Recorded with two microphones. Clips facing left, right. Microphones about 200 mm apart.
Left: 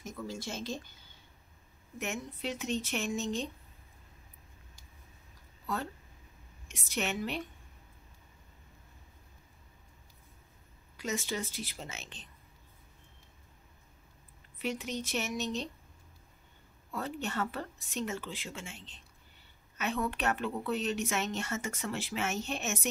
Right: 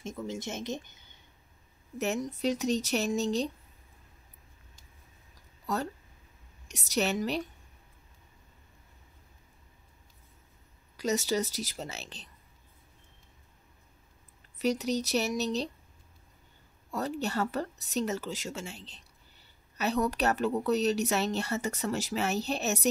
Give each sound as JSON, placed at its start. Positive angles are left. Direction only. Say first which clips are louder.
{"t": 0.0, "sound": "speech", "louder": "right 4 dB", "side_deg": -25}
{"t": 2.0, "sound": "a woman's voice", "louder": "right 7 dB", "side_deg": -40}
{"t": 6.7, "sound": "a woman's voice", "louder": "right 6 dB", "side_deg": -40}
{"t": 11.0, "sound": "a woman's voice", "louder": "right 7 dB", "side_deg": -40}
{"t": 14.6, "sound": "a woman's voice", "louder": "right 7 dB", "side_deg": -40}
{"t": 16.9, "sound": "a woman's voice", "louder": "right 4 dB", "side_deg": -40}